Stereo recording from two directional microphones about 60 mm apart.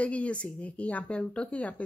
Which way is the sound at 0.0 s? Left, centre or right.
Left.